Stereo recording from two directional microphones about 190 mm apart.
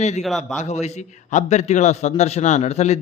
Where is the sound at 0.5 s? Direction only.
35° left (ahead or behind).